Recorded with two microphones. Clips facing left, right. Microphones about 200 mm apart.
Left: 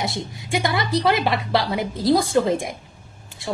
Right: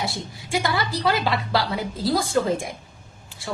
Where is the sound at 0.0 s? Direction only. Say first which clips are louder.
Left 2 dB; 20° left (ahead or behind).